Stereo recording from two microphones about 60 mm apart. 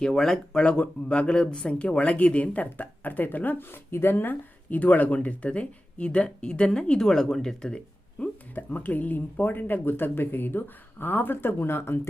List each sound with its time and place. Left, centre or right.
0.0 s speech: centre
8.2 s a sound: left
8.5 s speech: left